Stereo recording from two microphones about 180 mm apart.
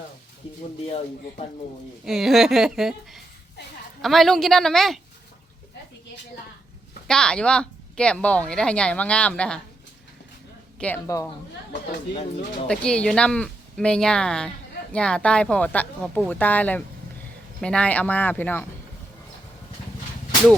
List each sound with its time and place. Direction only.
0.9 s a man's voice: 35° left (ahead or behind)
2.0 s speech: centre (ahead or behind)
7.1 s speech: 5° left (ahead or behind)
10.8 s speech: 10° left (ahead or behind)
12.6 s speech: 5° left (ahead or behind)